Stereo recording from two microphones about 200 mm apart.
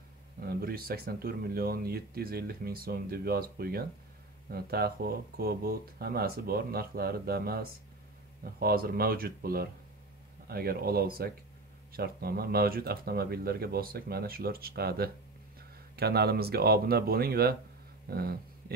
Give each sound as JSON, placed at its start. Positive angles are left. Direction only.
{"t": 0.4, "sound": "speech", "side_deg": -50}